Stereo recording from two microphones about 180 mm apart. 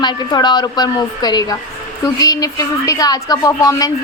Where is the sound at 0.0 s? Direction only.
25° left (ahead or behind).